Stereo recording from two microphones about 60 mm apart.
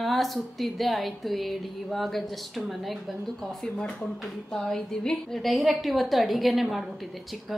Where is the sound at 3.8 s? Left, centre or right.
Centre.